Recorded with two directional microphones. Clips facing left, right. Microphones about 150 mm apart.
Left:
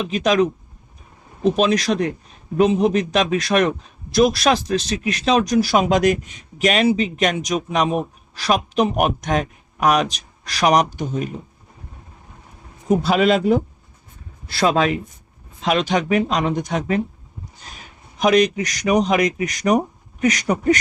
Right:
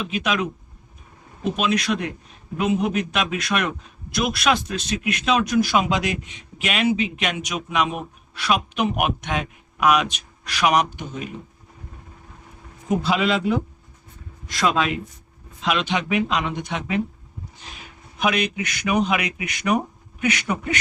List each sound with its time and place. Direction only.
0.0 s a man's voice: 40° left (ahead or behind)
1.5 s a man's voice: 35° left (ahead or behind)
13.0 s a man's voice: 45° left (ahead or behind)
18.2 s a man's voice: 40° left (ahead or behind)